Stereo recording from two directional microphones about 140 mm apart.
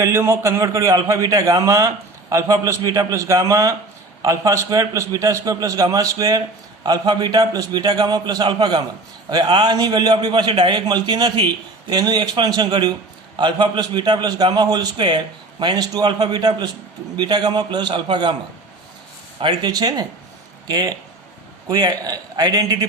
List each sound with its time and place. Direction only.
0.0 s a man's voice: 20° right (ahead or behind); by 18.3 s 35° right (ahead or behind)
19.4 s a man's voice: 30° right (ahead or behind)